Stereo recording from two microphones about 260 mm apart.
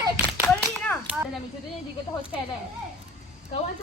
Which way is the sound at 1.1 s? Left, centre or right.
Centre.